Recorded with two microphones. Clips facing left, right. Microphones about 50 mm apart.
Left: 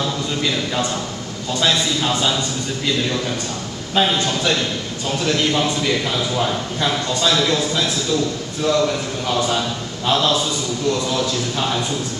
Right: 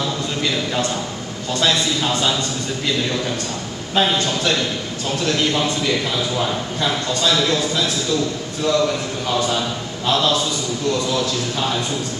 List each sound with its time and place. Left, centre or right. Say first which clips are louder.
0.0 s a sound: left 1 dB; centre
1.5 s a man's voice: even; centre
3.9 s a man's voice: even; centre